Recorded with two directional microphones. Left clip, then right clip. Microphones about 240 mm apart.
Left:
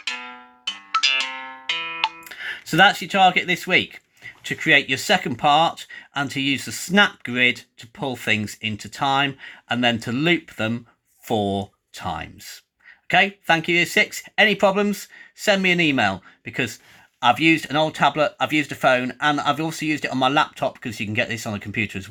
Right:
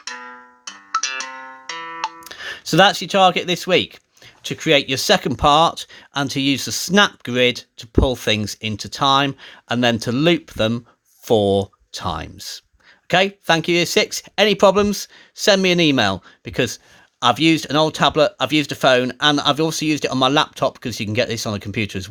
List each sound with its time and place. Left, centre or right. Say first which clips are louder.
0.0 s music: left 2 dB; centre
2.2 s speech: right 2 dB; right